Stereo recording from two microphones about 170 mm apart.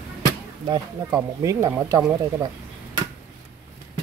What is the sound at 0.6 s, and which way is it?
Speech, 25° right (ahead or behind).